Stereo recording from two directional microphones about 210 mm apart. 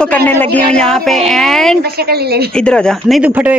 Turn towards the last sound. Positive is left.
turn(degrees=-5)  # may be behind; listen again after turning